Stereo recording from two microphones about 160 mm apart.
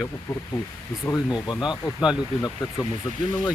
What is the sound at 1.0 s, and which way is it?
Speech, 20° left (ahead or behind).